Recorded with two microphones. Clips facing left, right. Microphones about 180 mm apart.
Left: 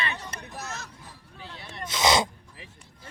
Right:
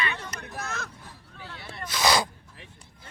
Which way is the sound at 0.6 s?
55° right (ahead or behind).